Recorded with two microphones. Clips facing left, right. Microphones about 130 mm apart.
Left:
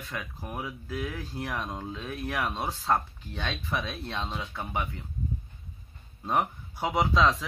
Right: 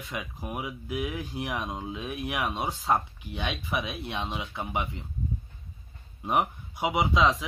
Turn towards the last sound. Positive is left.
turn(degrees=-15)  # may be behind; listen again after turning